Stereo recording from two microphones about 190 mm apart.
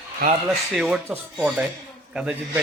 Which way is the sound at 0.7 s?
Centre (ahead or behind).